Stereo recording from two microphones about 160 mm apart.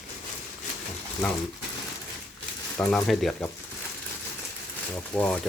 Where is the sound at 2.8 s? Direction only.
5° left (ahead or behind).